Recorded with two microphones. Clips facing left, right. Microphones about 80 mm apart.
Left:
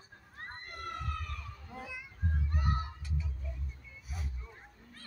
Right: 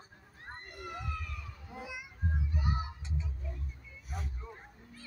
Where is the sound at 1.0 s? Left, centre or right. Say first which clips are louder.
Left 1 dB; left.